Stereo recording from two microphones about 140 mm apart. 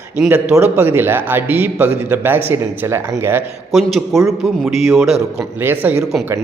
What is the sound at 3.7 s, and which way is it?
A man's voice, centre (ahead or behind).